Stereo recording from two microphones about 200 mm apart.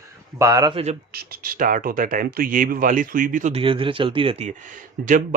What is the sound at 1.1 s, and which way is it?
Speech, 50° right (ahead or behind).